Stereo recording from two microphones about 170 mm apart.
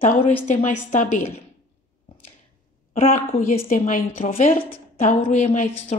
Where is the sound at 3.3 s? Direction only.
55° left (ahead or behind).